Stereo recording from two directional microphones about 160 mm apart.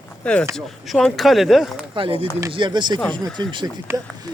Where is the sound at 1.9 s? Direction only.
35° right (ahead or behind).